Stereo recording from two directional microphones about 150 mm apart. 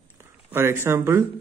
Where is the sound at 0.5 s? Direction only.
15° right (ahead or behind).